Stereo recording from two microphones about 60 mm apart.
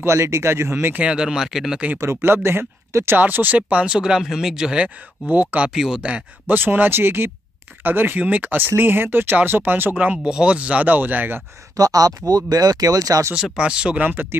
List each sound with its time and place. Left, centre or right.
0.0 s speech: right
0.9 s speech: centre
2.0 s speech: right
3.2 s speech: right
3.7 s speech: centre
5.7 s speech: centre
6.4 s speech: right
11.7 s speech: right
13.3 s speech: centre